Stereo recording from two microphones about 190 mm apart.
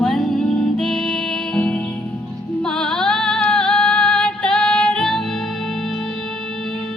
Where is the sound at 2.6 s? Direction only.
5° left (ahead or behind).